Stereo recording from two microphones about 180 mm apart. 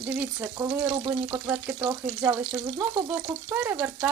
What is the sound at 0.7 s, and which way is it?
Speech, 25° right (ahead or behind).